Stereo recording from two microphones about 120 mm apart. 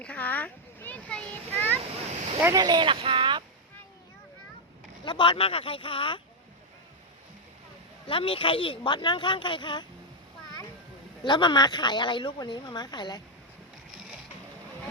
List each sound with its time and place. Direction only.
0.0 s a child's voice: 10° left (ahead or behind)
2.4 s speech: 30° right (ahead or behind)
5.0 s speech: 45° left (ahead or behind)
8.0 s speech: 45° left (ahead or behind)
11.2 s speech: 40° left (ahead or behind)